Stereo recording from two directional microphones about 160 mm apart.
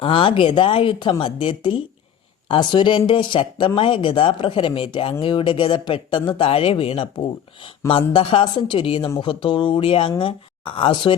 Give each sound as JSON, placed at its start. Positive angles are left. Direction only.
{"t": 0.0, "sound": "speech", "side_deg": 30}